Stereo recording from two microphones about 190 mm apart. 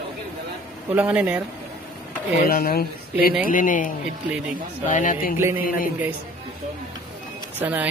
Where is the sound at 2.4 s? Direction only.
50° left (ahead or behind).